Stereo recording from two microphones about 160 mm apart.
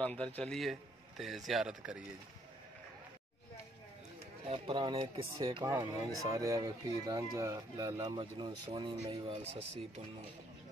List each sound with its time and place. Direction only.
0.0 s a man's voice: 5° left (ahead or behind)
4.5 s speech: 35° right (ahead or behind)
5.4 s speech: 25° right (ahead or behind); by 9.8 s 40° right (ahead or behind)